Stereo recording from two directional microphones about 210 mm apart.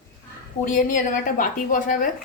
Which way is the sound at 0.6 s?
40° left (ahead or behind).